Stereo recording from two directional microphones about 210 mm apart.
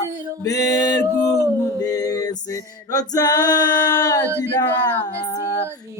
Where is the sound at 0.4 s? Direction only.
15° left (ahead or behind).